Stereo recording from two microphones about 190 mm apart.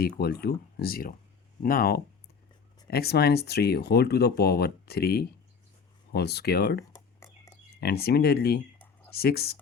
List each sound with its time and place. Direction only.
0.0 s speech: 55° left (ahead or behind)
6.9 s a sound: 20° left (ahead or behind)
7.8 s speech: 55° left (ahead or behind)